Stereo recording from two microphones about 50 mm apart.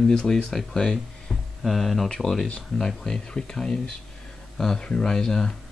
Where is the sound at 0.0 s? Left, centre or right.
Centre.